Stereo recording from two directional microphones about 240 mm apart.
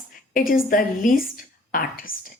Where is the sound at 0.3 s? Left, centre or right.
Left.